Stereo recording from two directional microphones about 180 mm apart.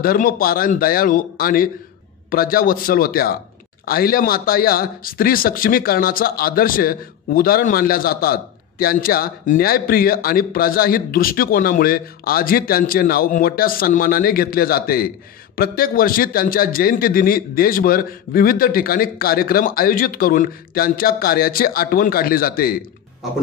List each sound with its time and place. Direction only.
0.0 s speech: 55° left (ahead or behind)